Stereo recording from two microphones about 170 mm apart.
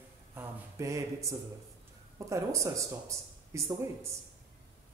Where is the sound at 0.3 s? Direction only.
15° right (ahead or behind).